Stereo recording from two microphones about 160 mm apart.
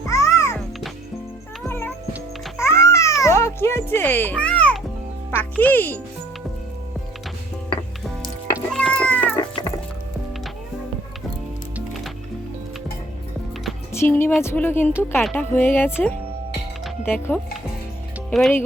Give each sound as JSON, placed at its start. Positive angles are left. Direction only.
{"t": 0.0, "sound": "music", "side_deg": 20}
{"t": 1.6, "sound": "music", "side_deg": 15}
{"t": 2.6, "sound": "babbling", "side_deg": 15}
{"t": 5.3, "sound": "a child's voice", "side_deg": 10}
{"t": 8.7, "sound": "cat", "side_deg": 5}
{"t": 9.4, "sound": "cat", "side_deg": 30}
{"t": 13.9, "sound": "a child's voice", "side_deg": 15}
{"t": 15.2, "sound": "speech", "side_deg": 5}
{"t": 15.5, "sound": "a child's voice", "side_deg": 15}
{"t": 18.3, "sound": "speech", "side_deg": 0}